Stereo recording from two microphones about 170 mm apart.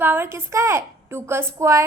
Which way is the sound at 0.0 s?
15° right (ahead or behind).